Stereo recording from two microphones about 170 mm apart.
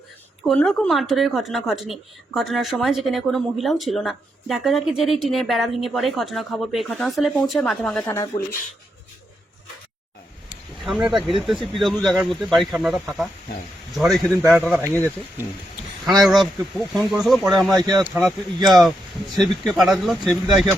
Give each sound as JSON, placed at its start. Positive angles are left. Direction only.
{"t": 0.4, "sound": "a woman's voice", "side_deg": 5}
{"t": 8.0, "sound": "speech", "side_deg": 20}
{"t": 10.5, "sound": "a sound", "side_deg": -5}
{"t": 11.3, "sound": "a woman's voice", "side_deg": 0}
{"t": 14.5, "sound": "speech", "side_deg": -10}
{"t": 16.2, "sound": "a woman's voice", "side_deg": 0}
{"t": 17.7, "sound": "speech", "side_deg": -25}
{"t": 18.0, "sound": "a woman's voice", "side_deg": -10}